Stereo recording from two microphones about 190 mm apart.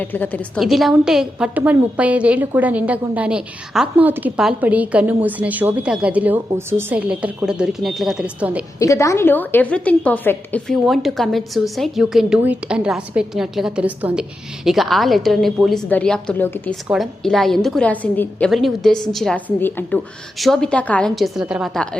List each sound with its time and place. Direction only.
0.0 s a woman's voice: 10° left (ahead or behind); by 8.6 s 5° right (ahead or behind)
8.8 s a woman's voice: 15° left (ahead or behind); by 21.8 s centre (ahead or behind)